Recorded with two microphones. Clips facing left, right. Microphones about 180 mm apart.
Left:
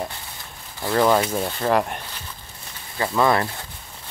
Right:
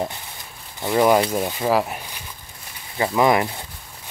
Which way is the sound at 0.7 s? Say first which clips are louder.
Right 2 dB; 15° right (ahead or behind).